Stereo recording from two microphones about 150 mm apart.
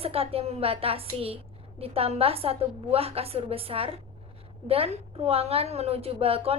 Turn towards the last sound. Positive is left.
turn(degrees=-40)  # may be behind; listen again after turning